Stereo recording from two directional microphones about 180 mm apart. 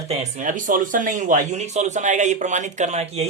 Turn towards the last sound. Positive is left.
turn(degrees=-35)  # may be behind; listen again after turning